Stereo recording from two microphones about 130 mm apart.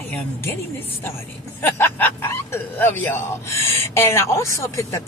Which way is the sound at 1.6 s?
15° left (ahead or behind).